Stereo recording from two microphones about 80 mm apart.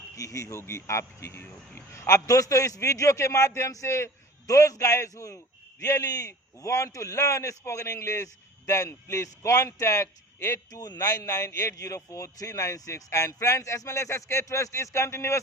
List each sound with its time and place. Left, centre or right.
0.2 s a man's voice: left
2.0 s a man's voice: left
10.7 s a man's voice: left